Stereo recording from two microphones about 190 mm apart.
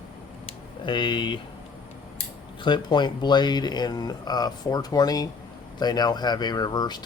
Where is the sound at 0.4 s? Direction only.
25° left (ahead or behind).